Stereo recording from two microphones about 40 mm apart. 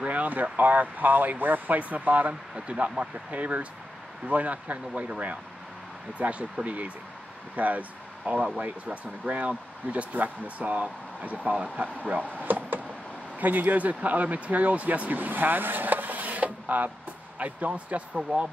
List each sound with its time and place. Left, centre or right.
0.0 s speech: right
2.5 s speech: right
6.1 s speech: right
12.4 s a sound: right
13.4 s speech: right